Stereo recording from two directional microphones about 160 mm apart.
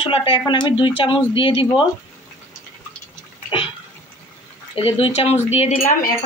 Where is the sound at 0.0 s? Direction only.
30° left (ahead or behind).